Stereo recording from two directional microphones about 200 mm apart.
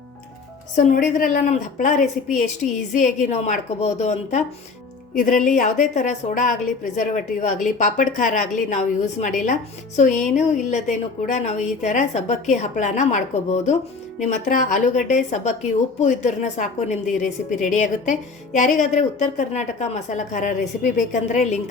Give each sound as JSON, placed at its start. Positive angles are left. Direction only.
{"t": 0.8, "sound": "a woman's voice", "side_deg": 40}